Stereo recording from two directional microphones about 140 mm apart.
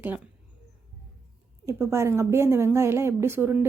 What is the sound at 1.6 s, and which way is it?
Speech, 20° right (ahead or behind).